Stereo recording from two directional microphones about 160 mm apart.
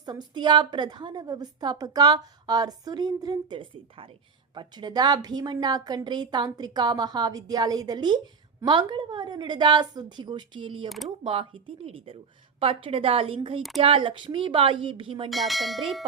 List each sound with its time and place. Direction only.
0.0 s a woman's voice: 25° right (ahead or behind)
10.8 s bell: centre (ahead or behind)
11.2 s a woman's voice: 35° right (ahead or behind)
15.3 s bell: centre (ahead or behind)